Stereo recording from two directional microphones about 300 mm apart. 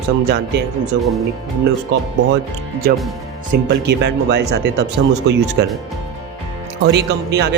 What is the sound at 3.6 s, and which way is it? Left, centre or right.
Speech, right.